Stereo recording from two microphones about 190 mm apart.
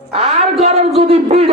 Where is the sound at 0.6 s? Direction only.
35° right (ahead or behind).